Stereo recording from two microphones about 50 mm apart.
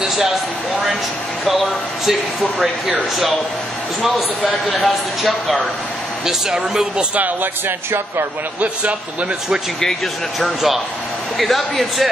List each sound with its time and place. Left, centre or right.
0.0 s speech: centre
1.4 s speech: centre
4.8 s speech: centre
6.2 s speech: centre
11.3 s speech: centre